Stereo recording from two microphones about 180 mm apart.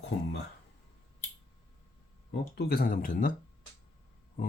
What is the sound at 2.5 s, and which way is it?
Speech, 60° left (ahead or behind).